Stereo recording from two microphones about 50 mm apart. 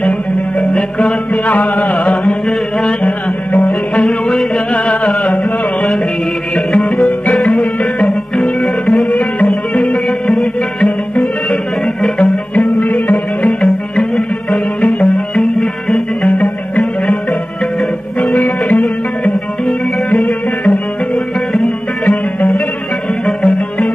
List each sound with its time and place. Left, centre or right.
0.6 s music: left
3.0 s music: left
4.0 s music: centre
5.2 s carnatic music: left
6.5 s music: left
12.2 s music: left
18.7 s music: left
22.0 s music: left
23.2 s music: left